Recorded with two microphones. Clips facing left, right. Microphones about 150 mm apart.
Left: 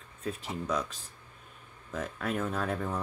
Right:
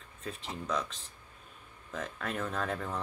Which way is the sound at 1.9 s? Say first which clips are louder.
Left 4 dB; 5° left (ahead or behind).